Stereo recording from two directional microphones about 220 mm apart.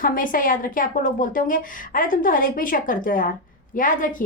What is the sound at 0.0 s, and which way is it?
A woman's voice, 40° left (ahead or behind).